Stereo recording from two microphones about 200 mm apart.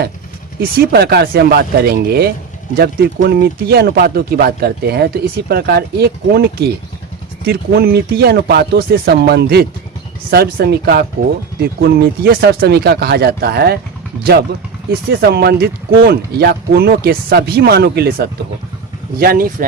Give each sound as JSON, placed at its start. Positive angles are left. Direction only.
{"t": 0.6, "sound": "speech", "side_deg": -50}
{"t": 15.1, "sound": "speech", "side_deg": -55}